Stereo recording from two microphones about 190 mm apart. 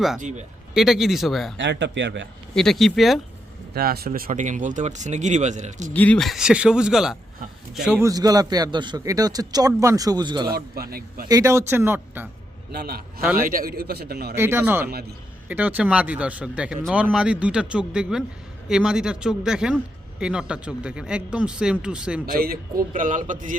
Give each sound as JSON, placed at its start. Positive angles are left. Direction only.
{"t": 0.2, "sound": "speech", "side_deg": -40}
{"t": 0.7, "sound": "a man's voice", "side_deg": 0}
{"t": 1.5, "sound": "speech", "side_deg": -70}
{"t": 2.6, "sound": "a man's voice", "side_deg": 0}
{"t": 3.8, "sound": "speech", "side_deg": -55}
{"t": 5.9, "sound": "a man's voice", "side_deg": 10}
{"t": 8.0, "sound": "a man's voice", "side_deg": -20}
{"t": 10.5, "sound": "speech", "side_deg": -55}
{"t": 11.3, "sound": "speech", "side_deg": -15}
{"t": 12.7, "sound": "a man's voice", "side_deg": -55}
{"t": 14.3, "sound": "a man's voice", "side_deg": -10}
{"t": 22.3, "sound": "speech", "side_deg": -50}